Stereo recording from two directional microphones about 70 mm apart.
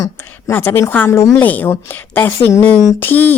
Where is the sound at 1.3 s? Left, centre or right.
Left.